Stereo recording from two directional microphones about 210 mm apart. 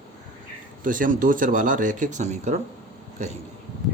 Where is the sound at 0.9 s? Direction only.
40° right (ahead or behind).